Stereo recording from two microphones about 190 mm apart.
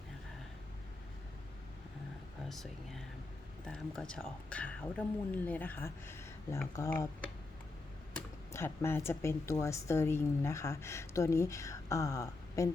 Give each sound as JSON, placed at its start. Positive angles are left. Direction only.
{"t": 2.5, "sound": "speech", "side_deg": 0}
{"t": 8.1, "sound": "speech", "side_deg": 10}